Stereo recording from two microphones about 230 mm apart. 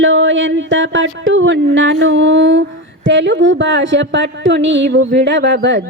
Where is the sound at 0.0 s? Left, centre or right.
Right.